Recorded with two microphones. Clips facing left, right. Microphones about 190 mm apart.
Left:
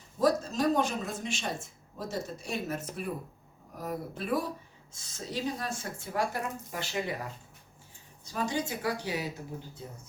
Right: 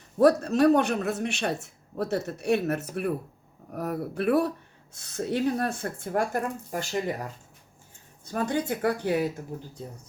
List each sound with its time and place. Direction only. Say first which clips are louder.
0.2 s speech: right 7 dB; 65° right (ahead or behind); by 7.3 s 45° right (ahead or behind)
8.2 s speech: right 4 dB; 55° right (ahead or behind)